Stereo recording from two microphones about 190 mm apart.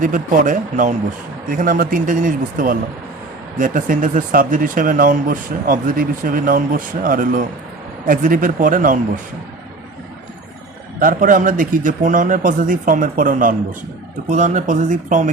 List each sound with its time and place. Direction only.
0.0 s speech: 45° right (ahead or behind)
11.0 s speech: 45° right (ahead or behind)